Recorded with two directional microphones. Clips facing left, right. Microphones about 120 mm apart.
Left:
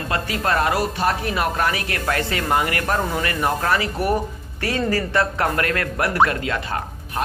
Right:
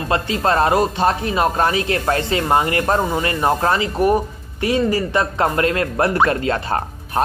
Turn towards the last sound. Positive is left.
turn(degrees=-35)  # may be behind; listen again after turning